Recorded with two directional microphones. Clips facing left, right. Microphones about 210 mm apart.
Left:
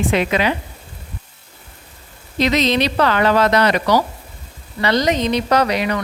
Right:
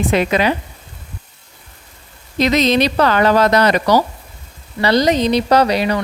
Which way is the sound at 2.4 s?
45° right (ahead or behind).